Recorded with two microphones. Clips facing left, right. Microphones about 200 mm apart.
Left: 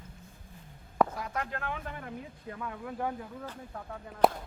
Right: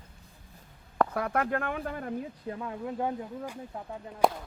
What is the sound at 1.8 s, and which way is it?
Speech, 40° right (ahead or behind).